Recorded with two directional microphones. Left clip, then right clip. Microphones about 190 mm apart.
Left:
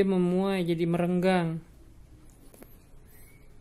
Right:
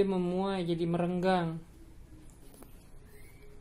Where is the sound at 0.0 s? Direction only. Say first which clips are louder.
Left 4 dB; 40° left (ahead or behind).